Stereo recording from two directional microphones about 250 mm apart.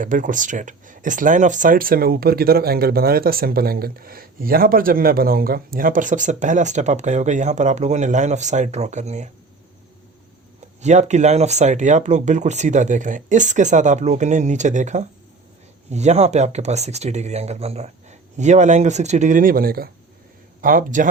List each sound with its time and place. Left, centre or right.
0.0 s speech: right
10.8 s speech: right